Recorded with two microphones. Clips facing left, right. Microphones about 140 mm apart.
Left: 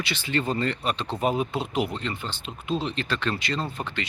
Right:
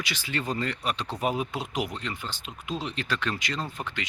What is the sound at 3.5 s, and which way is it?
Speech, 25° left (ahead or behind).